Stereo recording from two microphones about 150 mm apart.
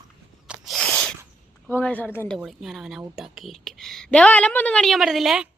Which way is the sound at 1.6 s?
10° left (ahead or behind).